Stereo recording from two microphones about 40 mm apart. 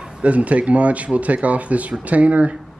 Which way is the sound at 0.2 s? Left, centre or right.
Right.